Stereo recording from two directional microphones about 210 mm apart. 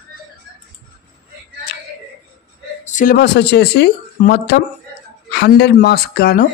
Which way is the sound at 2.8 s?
40° left (ahead or behind).